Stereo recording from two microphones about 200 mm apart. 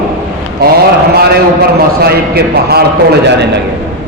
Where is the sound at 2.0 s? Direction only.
50° right (ahead or behind).